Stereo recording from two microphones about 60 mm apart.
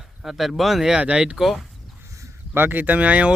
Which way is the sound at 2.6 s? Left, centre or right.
Right.